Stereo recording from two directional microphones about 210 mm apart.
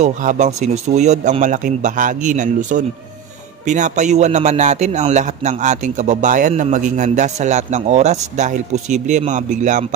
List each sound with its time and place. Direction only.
0.0 s a man's voice: 35° right (ahead or behind)